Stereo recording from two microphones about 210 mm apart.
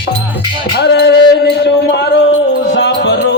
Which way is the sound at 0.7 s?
50° left (ahead or behind).